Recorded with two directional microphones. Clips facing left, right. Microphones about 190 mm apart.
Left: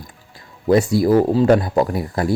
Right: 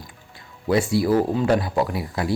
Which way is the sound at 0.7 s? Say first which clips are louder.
Left 5 dB; 45° left (ahead or behind).